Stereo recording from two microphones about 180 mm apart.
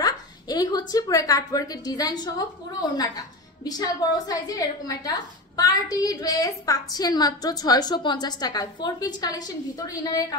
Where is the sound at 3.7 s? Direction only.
20° left (ahead or behind).